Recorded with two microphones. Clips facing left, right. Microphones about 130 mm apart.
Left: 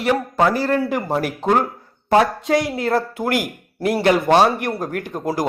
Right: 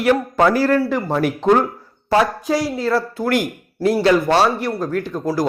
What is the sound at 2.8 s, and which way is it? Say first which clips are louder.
Speech: right 1 dB; 50° left (ahead or behind).